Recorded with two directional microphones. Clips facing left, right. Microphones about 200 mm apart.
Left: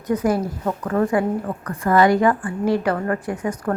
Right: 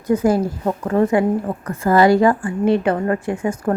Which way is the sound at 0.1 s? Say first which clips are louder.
Right 4 dB; 25° right (ahead or behind).